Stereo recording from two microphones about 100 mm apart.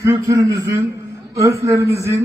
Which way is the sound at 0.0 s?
30° right (ahead or behind).